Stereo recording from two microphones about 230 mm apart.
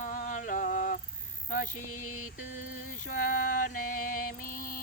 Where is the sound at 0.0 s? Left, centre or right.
Left.